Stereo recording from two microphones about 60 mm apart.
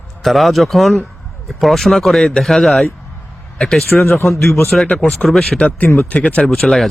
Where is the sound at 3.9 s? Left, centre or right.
Centre.